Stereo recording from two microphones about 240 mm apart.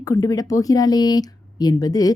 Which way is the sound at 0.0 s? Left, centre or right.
Centre.